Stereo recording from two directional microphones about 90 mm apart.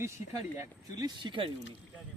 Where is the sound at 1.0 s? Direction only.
60° right (ahead or behind).